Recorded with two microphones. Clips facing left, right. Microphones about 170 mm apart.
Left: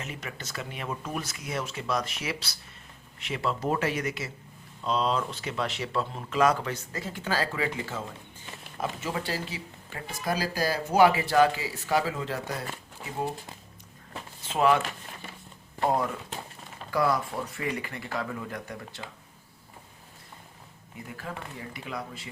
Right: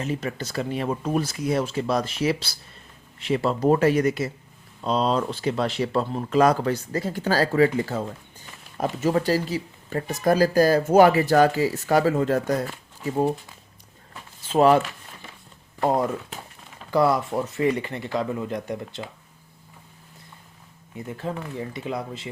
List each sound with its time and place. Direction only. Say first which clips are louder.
0.0 s speech: right 11 dB; 35° right (ahead or behind)
14.5 s speech: right 6 dB; 35° right (ahead or behind)
16.9 s speech: right 6 dB; 25° right (ahead or behind)
21.1 s speech: right 8 dB; 25° right (ahead or behind)